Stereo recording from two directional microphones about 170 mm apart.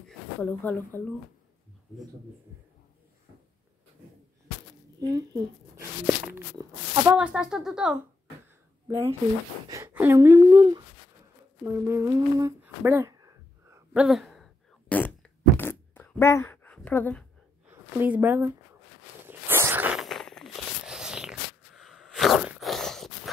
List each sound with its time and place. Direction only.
0.4 s speech: 10° left (ahead or behind)
5.0 s speech: 20° right (ahead or behind)
7.2 s speech: 5° right (ahead or behind)
8.8 s speech: 15° right (ahead or behind)
13.9 s fart: centre (ahead or behind)
17.6 s speech: 10° right (ahead or behind)
19.2 s a sound: 10° right (ahead or behind)